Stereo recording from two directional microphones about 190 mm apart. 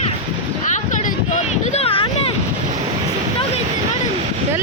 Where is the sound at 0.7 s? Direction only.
40° left (ahead or behind).